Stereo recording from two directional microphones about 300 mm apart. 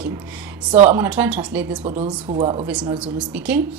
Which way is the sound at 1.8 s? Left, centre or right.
Right.